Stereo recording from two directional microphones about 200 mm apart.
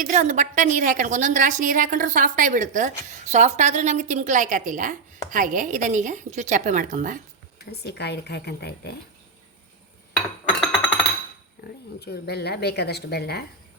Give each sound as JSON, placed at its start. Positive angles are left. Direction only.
{"t": 0.0, "sound": "a woman's voice", "side_deg": -40}
{"t": 7.6, "sound": "speech", "side_deg": 55}
{"t": 10.5, "sound": "music", "side_deg": 0}
{"t": 11.9, "sound": "speech", "side_deg": 55}